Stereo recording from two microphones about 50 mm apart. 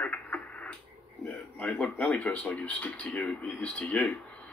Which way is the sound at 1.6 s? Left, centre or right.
Left.